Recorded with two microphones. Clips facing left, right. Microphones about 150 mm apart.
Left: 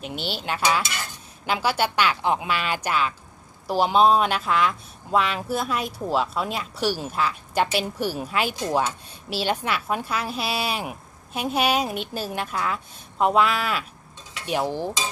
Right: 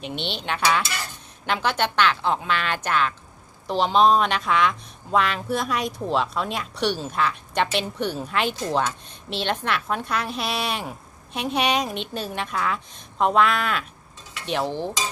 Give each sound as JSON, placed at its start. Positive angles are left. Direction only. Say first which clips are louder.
{"t": 0.0, "sound": "speech", "louder": "even", "side_deg": 5}